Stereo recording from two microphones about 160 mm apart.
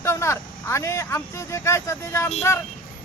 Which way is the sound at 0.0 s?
15° left (ahead or behind).